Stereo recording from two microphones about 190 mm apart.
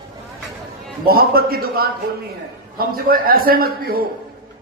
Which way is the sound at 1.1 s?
55° right (ahead or behind).